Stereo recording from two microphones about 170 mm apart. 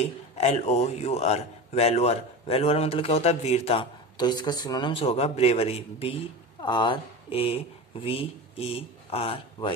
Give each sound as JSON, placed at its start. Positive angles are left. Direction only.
{"t": 0.0, "sound": "a man's voice", "side_deg": 40}
{"t": 4.2, "sound": "a man's voice", "side_deg": 25}